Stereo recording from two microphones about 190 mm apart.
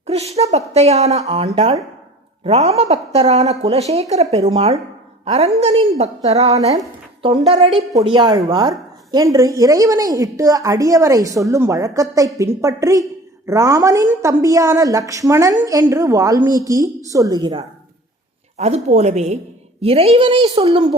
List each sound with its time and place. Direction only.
0.1 s a woman's voice: 35° right (ahead or behind)
18.5 s a woman's voice: 35° right (ahead or behind)